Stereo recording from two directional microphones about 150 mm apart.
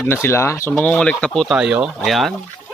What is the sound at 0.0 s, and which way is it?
Speech, 15° left (ahead or behind).